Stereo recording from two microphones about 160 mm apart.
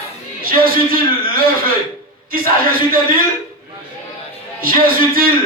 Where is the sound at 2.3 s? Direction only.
65° right (ahead or behind).